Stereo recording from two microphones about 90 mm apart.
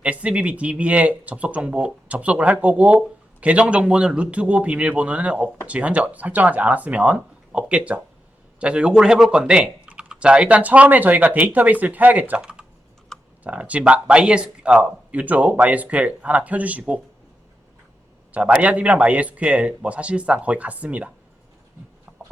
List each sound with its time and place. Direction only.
0.0 s speech: 15° right (ahead or behind)
18.3 s speech: 15° right (ahead or behind)